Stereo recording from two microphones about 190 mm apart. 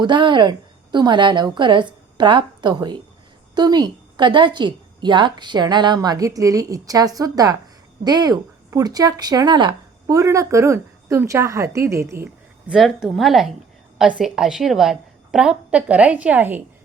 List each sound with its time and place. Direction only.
0.0 s a woman's voice: 25° right (ahead or behind)
12.7 s a woman's voice: centre (ahead or behind)